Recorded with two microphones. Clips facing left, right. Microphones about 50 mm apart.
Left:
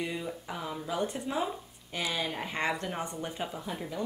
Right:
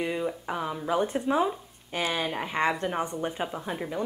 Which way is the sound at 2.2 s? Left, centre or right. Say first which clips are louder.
Right 5 dB; right.